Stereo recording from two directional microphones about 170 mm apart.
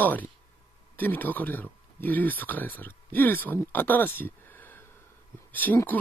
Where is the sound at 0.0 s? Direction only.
10° left (ahead or behind).